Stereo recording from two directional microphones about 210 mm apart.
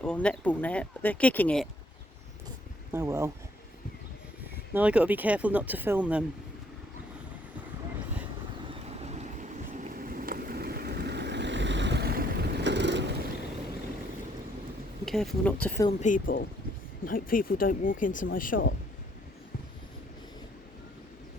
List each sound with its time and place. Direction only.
0.0 s speech: 5° left (ahead or behind)
2.9 s speech: 15° right (ahead or behind)
4.7 s speech: 5° right (ahead or behind)
9.0 s vehicle: 30° right (ahead or behind); by 13.1 s 55° right (ahead or behind)
15.0 s speech: centre (ahead or behind)
15.9 s speech: 35° left (ahead or behind)